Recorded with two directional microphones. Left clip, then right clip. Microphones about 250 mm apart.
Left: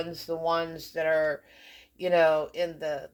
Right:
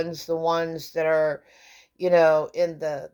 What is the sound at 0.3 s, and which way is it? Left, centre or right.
Speech, right.